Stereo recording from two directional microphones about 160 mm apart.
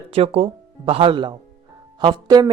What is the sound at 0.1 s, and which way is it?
A woman's voice, 40° right (ahead or behind).